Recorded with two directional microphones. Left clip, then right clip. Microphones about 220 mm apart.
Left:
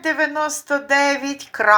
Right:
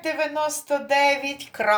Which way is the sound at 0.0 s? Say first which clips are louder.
Left 4 dB; 10° left (ahead or behind).